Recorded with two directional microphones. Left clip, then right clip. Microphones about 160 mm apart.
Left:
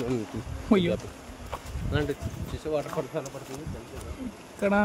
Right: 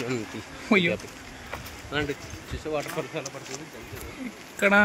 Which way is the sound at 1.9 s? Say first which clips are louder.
Right 1 dB; 30° left (ahead or behind).